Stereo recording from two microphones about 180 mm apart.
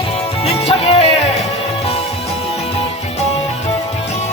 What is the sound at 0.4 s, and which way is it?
Music, 30° left (ahead or behind).